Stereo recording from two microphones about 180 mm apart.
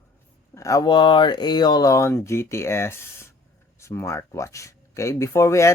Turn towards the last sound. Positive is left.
turn(degrees=15)  # may be behind; listen again after turning